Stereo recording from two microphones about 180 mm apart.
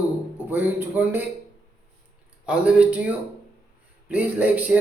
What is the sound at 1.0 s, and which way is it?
Speech, 10° right (ahead or behind).